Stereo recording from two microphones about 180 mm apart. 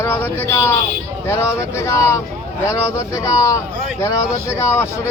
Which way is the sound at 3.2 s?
15° left (ahead or behind).